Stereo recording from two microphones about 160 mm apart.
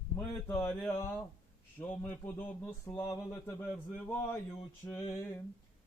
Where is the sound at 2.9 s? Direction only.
20° left (ahead or behind).